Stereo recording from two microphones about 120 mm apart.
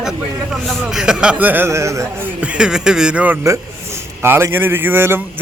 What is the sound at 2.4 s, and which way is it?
A man's voice, 5° right (ahead or behind).